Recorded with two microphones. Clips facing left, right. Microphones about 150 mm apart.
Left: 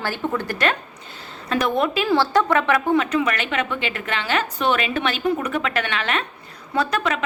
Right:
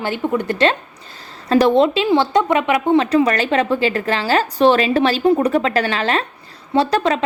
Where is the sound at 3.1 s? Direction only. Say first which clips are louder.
Right 7 dB; 35° right (ahead or behind).